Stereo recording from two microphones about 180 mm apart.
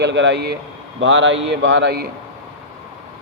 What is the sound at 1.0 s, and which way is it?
Speech, 90° right.